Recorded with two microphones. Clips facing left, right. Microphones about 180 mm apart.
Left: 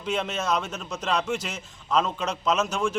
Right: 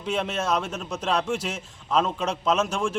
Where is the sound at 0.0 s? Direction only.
Centre (ahead or behind).